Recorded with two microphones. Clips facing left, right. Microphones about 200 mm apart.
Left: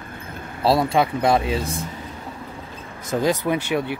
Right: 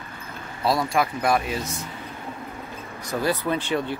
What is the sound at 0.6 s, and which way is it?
Speech, 30° left (ahead or behind).